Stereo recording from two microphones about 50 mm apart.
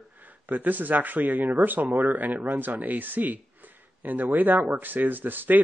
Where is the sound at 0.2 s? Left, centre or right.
Right.